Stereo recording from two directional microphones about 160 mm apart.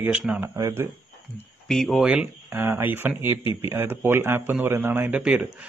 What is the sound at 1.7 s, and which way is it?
A man's voice, centre (ahead or behind).